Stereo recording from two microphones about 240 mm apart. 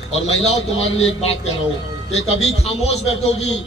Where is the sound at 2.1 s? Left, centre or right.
Left.